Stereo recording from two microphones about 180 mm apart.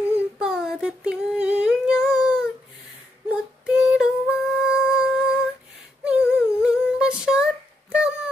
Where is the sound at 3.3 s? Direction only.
5° right (ahead or behind).